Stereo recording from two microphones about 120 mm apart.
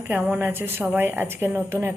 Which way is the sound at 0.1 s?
10° right (ahead or behind).